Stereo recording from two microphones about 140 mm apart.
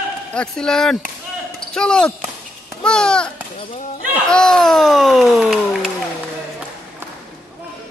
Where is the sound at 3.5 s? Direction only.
55° left (ahead or behind).